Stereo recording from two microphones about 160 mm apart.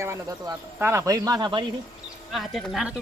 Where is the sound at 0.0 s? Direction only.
20° right (ahead or behind).